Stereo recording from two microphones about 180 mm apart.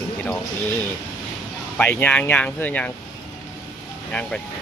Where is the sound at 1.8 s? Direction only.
10° left (ahead or behind).